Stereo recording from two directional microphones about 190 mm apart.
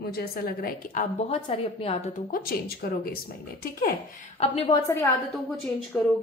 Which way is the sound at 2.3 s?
50° left (ahead or behind).